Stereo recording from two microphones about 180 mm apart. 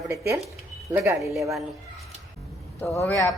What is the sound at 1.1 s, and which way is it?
Speech, centre (ahead or behind).